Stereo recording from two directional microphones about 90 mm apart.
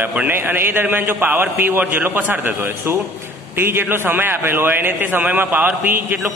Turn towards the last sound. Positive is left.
turn(degrees=-20)  # may be behind; listen again after turning